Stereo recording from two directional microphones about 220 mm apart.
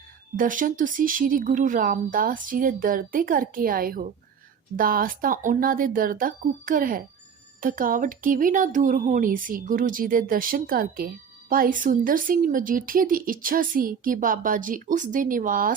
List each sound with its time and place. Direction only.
0.3 s speech: 40° right (ahead or behind)